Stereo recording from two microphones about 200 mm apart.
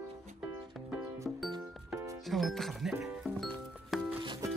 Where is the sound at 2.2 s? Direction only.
Centre (ahead or behind).